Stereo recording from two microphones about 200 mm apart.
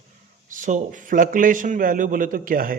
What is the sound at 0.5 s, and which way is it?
A man's voice, 40° right (ahead or behind).